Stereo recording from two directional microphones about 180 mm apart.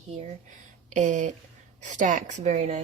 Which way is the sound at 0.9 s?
45° right (ahead or behind).